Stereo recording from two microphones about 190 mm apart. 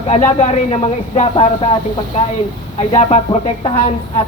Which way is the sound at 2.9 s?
35° left (ahead or behind).